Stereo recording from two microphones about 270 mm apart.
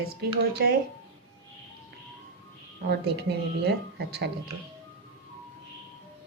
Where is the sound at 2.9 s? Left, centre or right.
Right.